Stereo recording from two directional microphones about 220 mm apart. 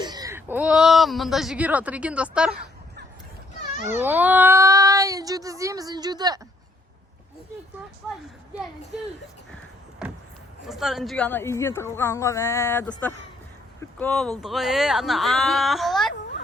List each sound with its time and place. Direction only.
0.0 s speech: 15° right (ahead or behind)
3.8 s speech: 10° right (ahead or behind)
10.0 s a sound: 5° right (ahead or behind)
10.7 s a woman's voice: centre (ahead or behind)